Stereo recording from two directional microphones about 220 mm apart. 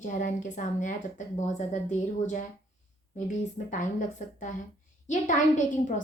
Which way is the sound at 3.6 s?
35° left (ahead or behind).